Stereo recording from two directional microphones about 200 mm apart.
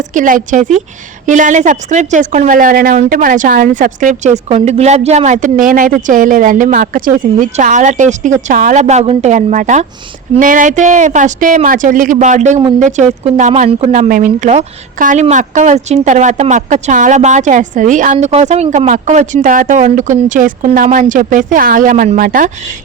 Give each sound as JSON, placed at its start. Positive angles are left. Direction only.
{"t": 0.1, "sound": "a woman's voice", "side_deg": -40}